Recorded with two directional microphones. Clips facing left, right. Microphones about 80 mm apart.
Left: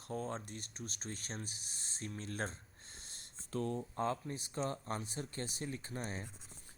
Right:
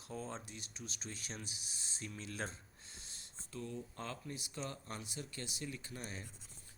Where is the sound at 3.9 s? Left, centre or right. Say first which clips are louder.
Left 8 dB; left.